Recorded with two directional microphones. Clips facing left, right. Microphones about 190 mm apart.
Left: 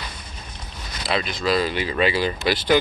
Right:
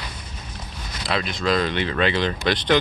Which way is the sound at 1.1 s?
Centre (ahead or behind).